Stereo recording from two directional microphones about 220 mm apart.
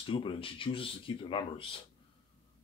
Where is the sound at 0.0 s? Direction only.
25° left (ahead or behind).